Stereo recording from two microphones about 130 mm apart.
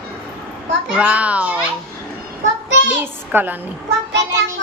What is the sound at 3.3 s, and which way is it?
Speech, 15° right (ahead or behind).